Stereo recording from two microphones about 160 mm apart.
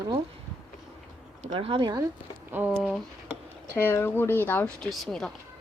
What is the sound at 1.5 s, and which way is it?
Speech, 35° right (ahead or behind).